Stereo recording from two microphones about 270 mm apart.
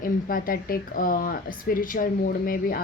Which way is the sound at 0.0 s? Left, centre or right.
Left.